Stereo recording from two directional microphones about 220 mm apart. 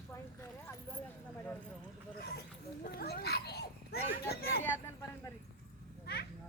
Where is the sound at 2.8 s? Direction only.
45° left (ahead or behind).